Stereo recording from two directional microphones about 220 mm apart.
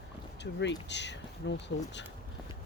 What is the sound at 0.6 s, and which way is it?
Speech, 50° left (ahead or behind).